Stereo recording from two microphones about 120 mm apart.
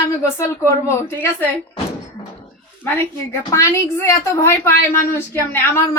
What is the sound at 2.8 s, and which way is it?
A woman's voice, 20° left (ahead or behind).